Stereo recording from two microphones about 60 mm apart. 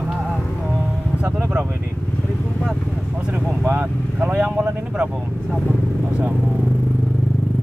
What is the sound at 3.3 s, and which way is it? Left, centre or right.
Speech, centre.